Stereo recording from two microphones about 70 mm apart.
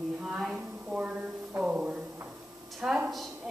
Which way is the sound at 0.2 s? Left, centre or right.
Centre.